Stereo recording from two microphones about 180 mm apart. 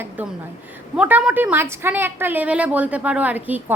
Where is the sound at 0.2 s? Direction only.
10° right (ahead or behind).